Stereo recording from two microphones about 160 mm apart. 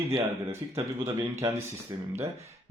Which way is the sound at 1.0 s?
20° right (ahead or behind).